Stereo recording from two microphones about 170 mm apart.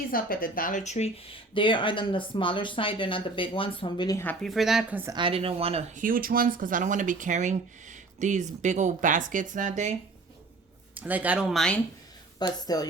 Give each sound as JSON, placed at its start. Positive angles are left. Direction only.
{"t": 0.1, "sound": "speech", "side_deg": 55}
{"t": 4.2, "sound": "speech", "side_deg": 10}
{"t": 4.4, "sound": "a woman's voice", "side_deg": 0}
{"t": 5.1, "sound": "speech", "side_deg": -30}
{"t": 6.0, "sound": "speech", "side_deg": -55}
{"t": 10.9, "sound": "speech", "side_deg": -10}
{"t": 12.4, "sound": "speech", "side_deg": 20}